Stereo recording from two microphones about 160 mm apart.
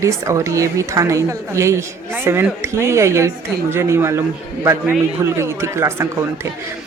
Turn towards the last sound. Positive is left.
turn(degrees=-15)  # may be behind; listen again after turning